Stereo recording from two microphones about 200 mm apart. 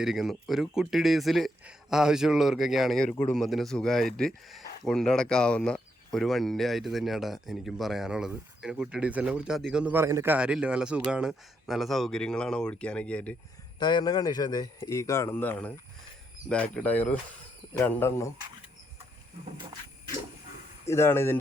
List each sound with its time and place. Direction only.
0.0 s speech: centre (ahead or behind)
13.7 s speech: 20° left (ahead or behind)
20.8 s speech: 15° left (ahead or behind)